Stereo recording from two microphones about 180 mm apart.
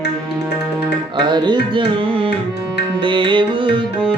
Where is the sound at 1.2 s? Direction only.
25° right (ahead or behind).